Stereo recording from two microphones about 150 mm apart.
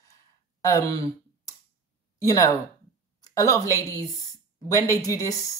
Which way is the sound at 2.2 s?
20° left (ahead or behind).